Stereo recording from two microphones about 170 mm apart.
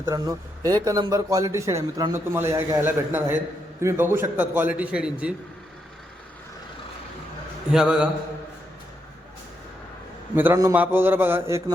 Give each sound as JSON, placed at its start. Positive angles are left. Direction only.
{"t": 0.0, "sound": "speech", "side_deg": -20}
{"t": 7.7, "sound": "a man's voice", "side_deg": -5}
{"t": 10.3, "sound": "speech", "side_deg": -15}